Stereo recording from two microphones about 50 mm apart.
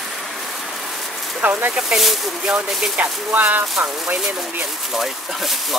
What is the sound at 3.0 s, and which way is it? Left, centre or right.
Speech, right.